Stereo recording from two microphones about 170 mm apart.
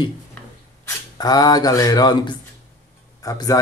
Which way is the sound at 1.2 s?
25° left (ahead or behind).